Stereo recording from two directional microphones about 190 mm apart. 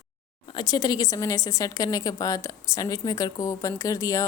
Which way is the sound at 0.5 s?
20° left (ahead or behind).